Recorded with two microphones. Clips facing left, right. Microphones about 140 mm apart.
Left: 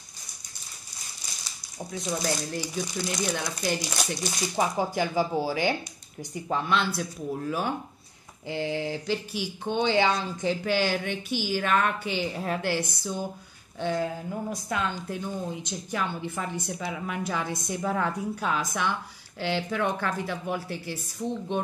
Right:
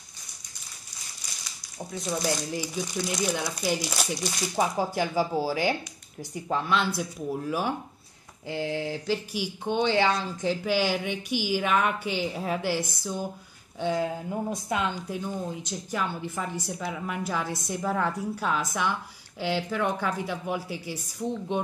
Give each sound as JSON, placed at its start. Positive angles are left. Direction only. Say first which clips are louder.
{"t": 1.8, "sound": "a woman's voice", "louder": "even", "side_deg": 0}
{"t": 15.5, "sound": "a woman's voice", "louder": "even", "side_deg": 0}